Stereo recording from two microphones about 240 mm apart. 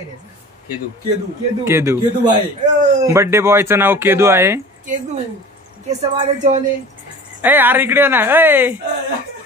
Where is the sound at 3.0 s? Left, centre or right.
Centre.